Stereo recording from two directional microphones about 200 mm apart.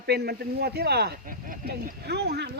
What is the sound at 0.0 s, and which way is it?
Speech, 55° right (ahead or behind).